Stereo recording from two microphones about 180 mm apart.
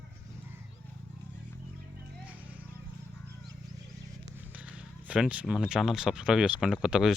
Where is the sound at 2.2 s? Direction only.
10° right (ahead or behind).